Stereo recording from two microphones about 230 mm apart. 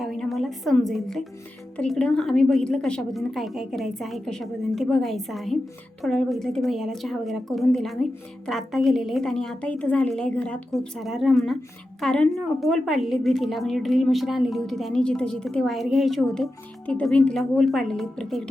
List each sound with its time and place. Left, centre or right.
0.0 s a woman's voice: centre